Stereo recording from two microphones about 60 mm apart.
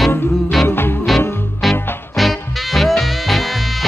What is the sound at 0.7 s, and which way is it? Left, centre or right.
Music, left.